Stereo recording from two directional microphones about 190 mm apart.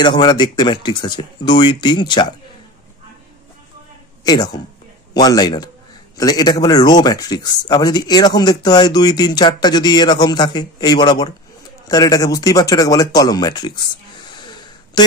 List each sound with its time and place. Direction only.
0.0 s a man's voice: 25° left (ahead or behind)
4.2 s a woman's voice: 20° left (ahead or behind)
15.0 s music: 25° left (ahead or behind)